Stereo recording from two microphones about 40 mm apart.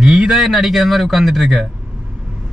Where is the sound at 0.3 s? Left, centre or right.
Centre.